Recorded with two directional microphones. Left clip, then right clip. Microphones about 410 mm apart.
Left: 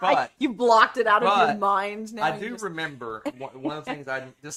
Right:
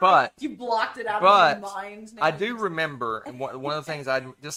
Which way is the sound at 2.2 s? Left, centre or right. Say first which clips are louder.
Right 3 dB; right.